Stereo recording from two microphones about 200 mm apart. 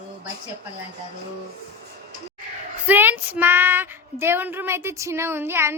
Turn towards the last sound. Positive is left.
turn(degrees=-10)  # may be behind; listen again after turning